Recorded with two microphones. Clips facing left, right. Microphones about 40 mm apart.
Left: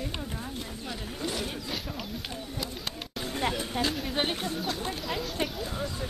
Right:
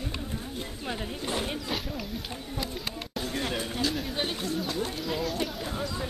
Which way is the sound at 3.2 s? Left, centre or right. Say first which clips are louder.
Left 3 dB; left.